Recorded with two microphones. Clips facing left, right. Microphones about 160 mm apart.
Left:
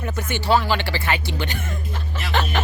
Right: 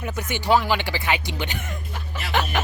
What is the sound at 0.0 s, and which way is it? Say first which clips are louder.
Speech: left 1 dB; 15° right (ahead or behind).